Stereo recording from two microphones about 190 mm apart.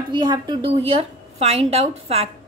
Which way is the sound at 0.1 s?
25° right (ahead or behind).